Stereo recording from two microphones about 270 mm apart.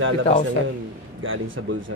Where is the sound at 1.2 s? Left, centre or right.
Right.